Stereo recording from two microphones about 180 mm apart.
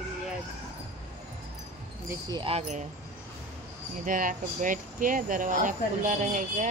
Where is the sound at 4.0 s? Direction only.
50° right (ahead or behind).